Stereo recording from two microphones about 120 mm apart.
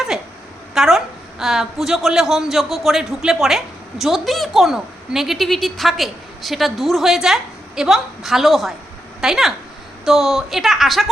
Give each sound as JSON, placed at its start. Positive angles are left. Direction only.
{"t": 0.7, "sound": "a woman's voice", "side_deg": -5}